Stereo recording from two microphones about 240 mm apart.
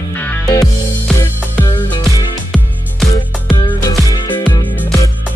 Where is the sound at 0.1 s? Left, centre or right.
Centre.